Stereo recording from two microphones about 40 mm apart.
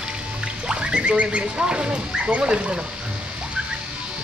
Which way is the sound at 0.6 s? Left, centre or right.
Right.